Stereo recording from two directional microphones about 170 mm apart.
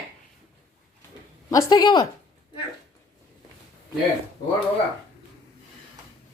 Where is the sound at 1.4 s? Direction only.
20° left (ahead or behind).